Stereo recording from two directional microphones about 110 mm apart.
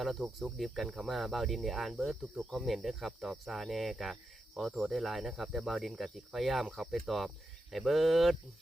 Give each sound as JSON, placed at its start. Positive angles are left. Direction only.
{"t": 0.0, "sound": "cricket", "side_deg": 0}